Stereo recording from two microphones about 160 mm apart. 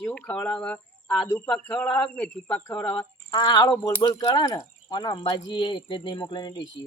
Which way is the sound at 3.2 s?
25° left (ahead or behind).